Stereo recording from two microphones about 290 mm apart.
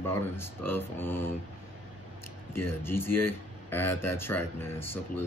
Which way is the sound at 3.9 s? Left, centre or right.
Left.